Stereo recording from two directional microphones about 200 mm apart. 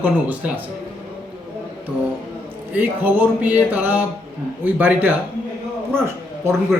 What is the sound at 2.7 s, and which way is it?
A man's voice, 10° right (ahead or behind).